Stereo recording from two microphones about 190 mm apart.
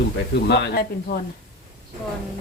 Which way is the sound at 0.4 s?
65° left (ahead or behind).